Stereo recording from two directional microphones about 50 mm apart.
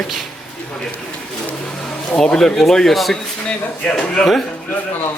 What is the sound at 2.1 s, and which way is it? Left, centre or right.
Speech, centre.